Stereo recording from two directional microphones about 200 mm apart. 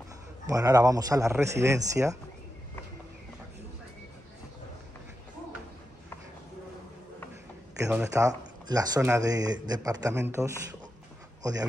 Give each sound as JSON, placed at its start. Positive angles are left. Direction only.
{"t": 0.5, "sound": "speech", "side_deg": -20}
{"t": 7.8, "sound": "speech", "side_deg": -10}